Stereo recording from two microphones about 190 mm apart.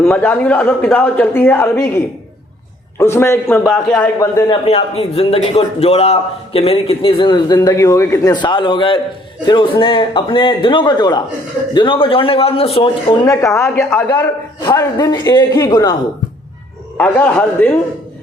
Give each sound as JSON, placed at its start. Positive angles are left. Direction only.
{"t": 0.0, "sound": "a man's voice", "side_deg": 5}
{"t": 3.0, "sound": "a man's voice", "side_deg": 15}
{"t": 4.2, "sound": "a man's voice", "side_deg": 15}
{"t": 4.6, "sound": "a man's voice", "side_deg": 30}
{"t": 14.1, "sound": "a man's voice", "side_deg": 20}
{"t": 17.0, "sound": "a man's voice", "side_deg": 5}